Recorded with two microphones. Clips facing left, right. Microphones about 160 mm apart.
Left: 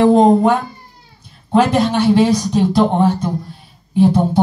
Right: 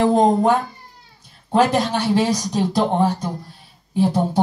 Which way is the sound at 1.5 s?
40° right (ahead or behind).